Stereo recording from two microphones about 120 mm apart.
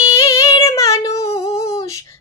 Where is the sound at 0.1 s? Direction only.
25° left (ahead or behind).